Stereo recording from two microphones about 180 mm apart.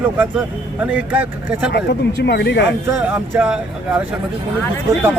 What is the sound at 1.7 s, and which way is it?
Speech, 65° left (ahead or behind).